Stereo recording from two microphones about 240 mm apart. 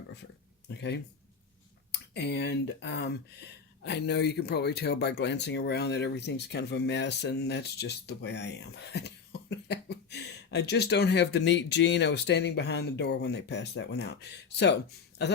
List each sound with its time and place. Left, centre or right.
0.7 s speech: left